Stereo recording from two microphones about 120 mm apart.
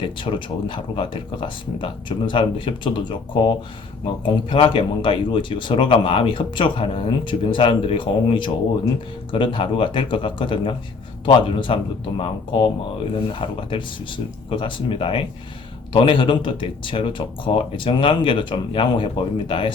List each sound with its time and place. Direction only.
0.0 s speech: 45° left (ahead or behind)
13.4 s speech: 45° left (ahead or behind)